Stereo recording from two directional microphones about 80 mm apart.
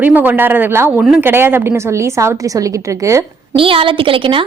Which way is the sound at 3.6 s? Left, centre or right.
Right.